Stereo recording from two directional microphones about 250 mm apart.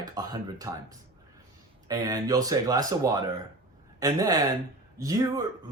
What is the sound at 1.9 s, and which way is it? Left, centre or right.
Speech, centre.